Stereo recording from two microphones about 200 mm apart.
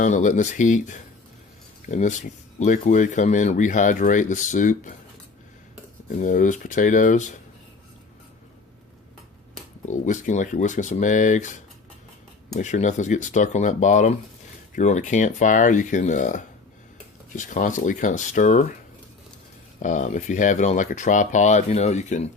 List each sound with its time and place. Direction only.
0.0 s speech: 40° left (ahead or behind)
6.1 s speech: 40° left (ahead or behind)
9.8 s speech: 40° left (ahead or behind)
19.8 s speech: 40° left (ahead or behind)